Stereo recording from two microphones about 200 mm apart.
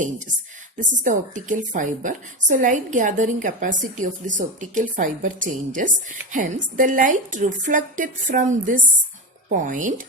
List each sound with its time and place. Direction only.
0.8 s a woman's voice: 40° right (ahead or behind)